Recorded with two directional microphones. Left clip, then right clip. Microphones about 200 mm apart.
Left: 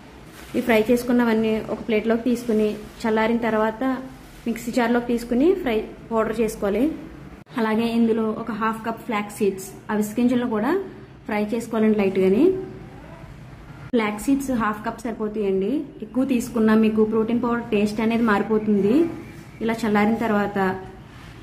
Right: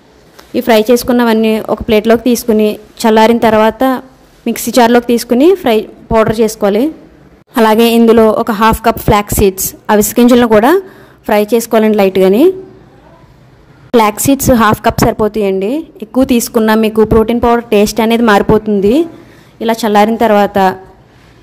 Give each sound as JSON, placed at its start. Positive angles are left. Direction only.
{"t": 0.6, "sound": "a woman's voice", "side_deg": -40}
{"t": 13.9, "sound": "a woman's voice", "side_deg": -45}
{"t": 19.6, "sound": "a woman's voice", "side_deg": -40}